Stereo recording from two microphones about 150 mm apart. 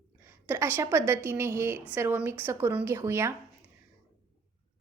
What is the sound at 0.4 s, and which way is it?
A woman's voice, 15° right (ahead or behind).